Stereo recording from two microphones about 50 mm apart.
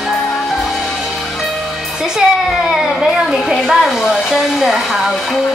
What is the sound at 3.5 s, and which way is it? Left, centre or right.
Hair dryer, centre.